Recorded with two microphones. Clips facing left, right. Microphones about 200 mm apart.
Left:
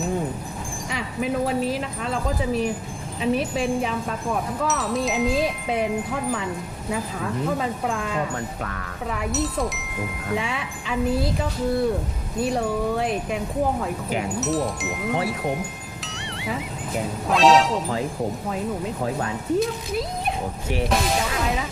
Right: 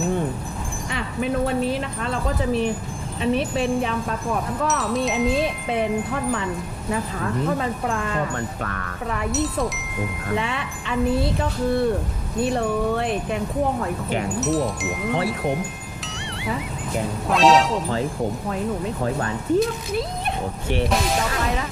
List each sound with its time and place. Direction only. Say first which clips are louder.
0.9 s chime: right 1 dB; 5° left (ahead or behind)
16.1 s music: right 2 dB; centre (ahead or behind)
17.2 s chime: even; centre (ahead or behind)
19.0 s chime: right 2 dB; centre (ahead or behind)